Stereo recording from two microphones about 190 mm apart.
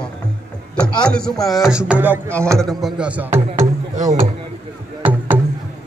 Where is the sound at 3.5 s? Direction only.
40° right (ahead or behind).